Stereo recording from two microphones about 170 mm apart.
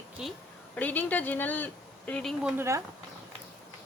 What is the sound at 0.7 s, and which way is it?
A woman's voice, 10° left (ahead or behind).